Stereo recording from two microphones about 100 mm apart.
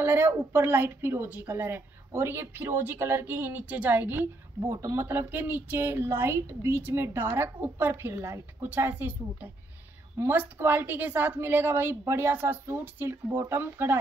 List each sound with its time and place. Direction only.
0.0 s a woman's voice: 25° right (ahead or behind)